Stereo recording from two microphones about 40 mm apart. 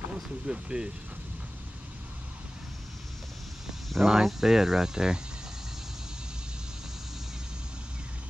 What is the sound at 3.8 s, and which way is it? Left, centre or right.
Speech, centre.